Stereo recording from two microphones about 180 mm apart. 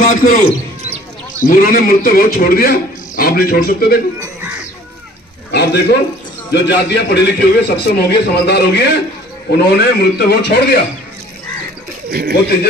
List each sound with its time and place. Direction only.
0.0 s a man's voice: 50° left (ahead or behind)
5.5 s a man's voice: 65° left (ahead or behind)
12.1 s speech: 60° right (ahead or behind)